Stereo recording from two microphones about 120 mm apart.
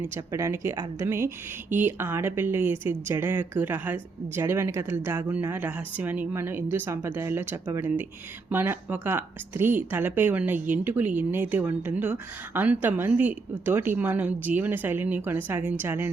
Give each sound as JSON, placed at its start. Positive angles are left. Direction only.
{"t": 0.0, "sound": "a woman's voice", "side_deg": -25}